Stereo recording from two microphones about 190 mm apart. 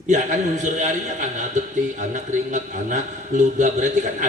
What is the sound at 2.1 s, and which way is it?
A man's voice, 40° right (ahead or behind).